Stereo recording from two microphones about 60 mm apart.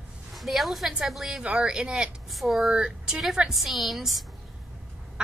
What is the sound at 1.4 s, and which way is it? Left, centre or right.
Speech, centre.